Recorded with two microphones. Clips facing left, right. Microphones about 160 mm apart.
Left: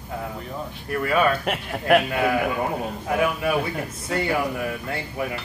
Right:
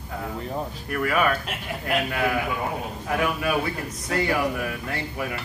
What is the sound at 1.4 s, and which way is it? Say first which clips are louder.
Speech: left 5 dB; 65° left (ahead or behind).